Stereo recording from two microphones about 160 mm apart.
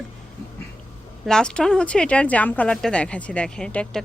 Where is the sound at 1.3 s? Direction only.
5° left (ahead or behind).